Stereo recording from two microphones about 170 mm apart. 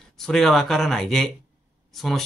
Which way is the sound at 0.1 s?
Centre (ahead or behind).